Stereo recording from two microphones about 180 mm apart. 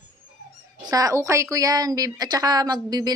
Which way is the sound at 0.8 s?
20° right (ahead or behind).